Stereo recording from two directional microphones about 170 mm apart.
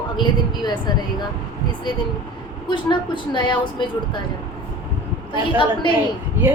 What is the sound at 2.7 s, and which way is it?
Speech, 25° left (ahead or behind).